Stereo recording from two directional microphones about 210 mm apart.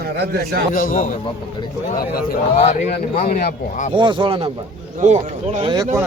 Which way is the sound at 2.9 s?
45° left (ahead or behind).